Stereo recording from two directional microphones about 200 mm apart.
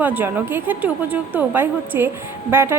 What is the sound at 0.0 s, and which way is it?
A woman's voice, 10° right (ahead or behind).